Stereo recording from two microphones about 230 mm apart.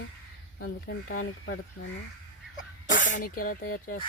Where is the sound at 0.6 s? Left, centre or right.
Left.